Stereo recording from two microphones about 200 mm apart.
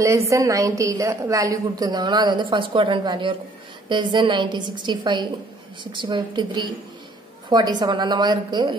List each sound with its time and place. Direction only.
0.0 s a woman's voice: 15° right (ahead or behind)